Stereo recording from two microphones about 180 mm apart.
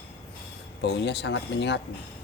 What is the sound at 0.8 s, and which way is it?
Speech, 70° left (ahead or behind).